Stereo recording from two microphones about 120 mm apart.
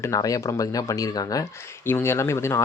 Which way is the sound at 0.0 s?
30° left (ahead or behind).